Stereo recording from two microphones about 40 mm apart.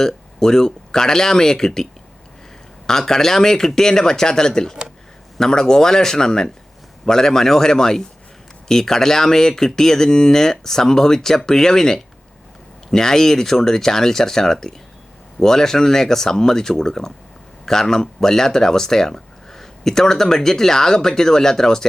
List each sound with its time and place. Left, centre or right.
0.0 s speech: centre
3.1 s speech: centre